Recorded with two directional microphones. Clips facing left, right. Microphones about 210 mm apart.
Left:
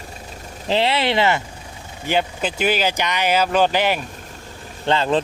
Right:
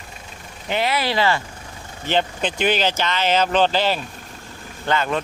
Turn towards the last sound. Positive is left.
turn(degrees=30)  # may be behind; listen again after turning